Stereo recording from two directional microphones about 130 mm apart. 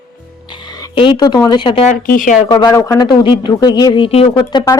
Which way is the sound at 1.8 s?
90° left.